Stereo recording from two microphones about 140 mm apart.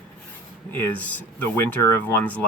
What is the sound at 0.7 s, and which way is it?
Speech, 15° left (ahead or behind).